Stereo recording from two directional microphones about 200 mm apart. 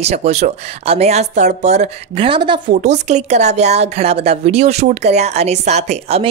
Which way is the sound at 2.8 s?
35° right (ahead or behind).